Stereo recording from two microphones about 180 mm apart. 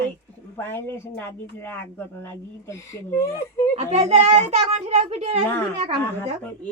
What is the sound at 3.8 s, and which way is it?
A child's voice, 35° right (ahead or behind).